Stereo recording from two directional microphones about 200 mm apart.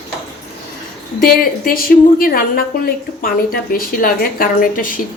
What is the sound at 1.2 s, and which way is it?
A woman's voice, 45° left (ahead or behind).